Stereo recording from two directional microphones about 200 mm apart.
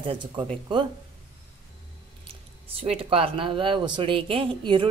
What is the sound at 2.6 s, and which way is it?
Speech, 30° right (ahead or behind).